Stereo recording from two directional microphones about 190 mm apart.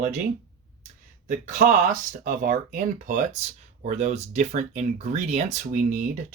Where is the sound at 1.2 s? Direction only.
40° right (ahead or behind).